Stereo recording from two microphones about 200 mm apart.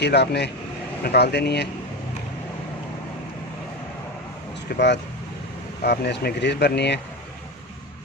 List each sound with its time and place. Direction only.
0.0 s speech: 55° left (ahead or behind)
4.7 s speech: 55° left (ahead or behind)